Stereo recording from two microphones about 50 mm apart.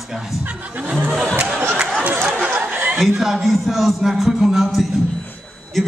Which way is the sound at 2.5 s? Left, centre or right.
Right.